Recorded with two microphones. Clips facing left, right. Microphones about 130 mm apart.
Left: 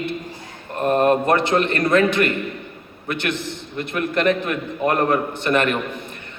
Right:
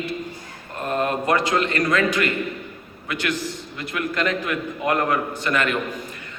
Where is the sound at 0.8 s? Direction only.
50° left (ahead or behind).